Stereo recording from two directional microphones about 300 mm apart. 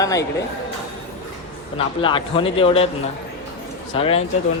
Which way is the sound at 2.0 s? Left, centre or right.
Centre.